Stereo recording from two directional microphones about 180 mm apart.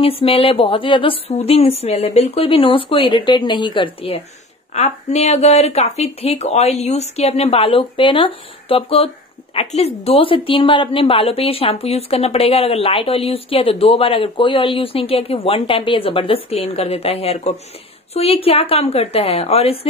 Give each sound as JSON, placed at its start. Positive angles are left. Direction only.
{"t": 0.0, "sound": "speech", "side_deg": 30}
{"t": 4.7, "sound": "speech", "side_deg": 40}